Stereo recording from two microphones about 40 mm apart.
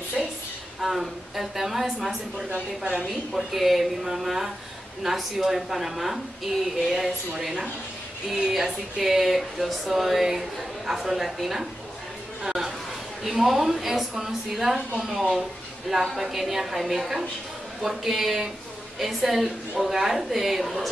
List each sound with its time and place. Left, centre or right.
0.7 s a woman's voice: centre
2.8 s a woman's voice: right
3.1 s a woman's voice: centre